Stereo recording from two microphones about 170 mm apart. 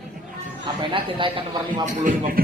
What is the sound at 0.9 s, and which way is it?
Speech, 30° right (ahead or behind).